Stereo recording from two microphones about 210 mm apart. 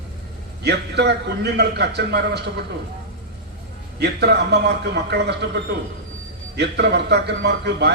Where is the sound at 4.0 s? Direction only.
50° right (ahead or behind).